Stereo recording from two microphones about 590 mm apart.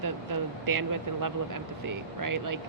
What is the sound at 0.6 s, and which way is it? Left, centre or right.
Speech, right.